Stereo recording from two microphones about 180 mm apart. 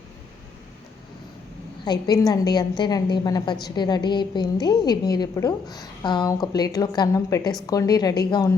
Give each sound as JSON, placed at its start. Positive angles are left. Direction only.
{"t": 1.8, "sound": "a woman's voice", "side_deg": 20}